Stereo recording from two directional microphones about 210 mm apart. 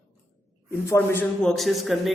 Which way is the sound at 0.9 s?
10° left (ahead or behind).